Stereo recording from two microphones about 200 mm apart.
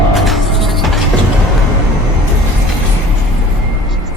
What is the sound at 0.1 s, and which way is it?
Music, centre (ahead or behind).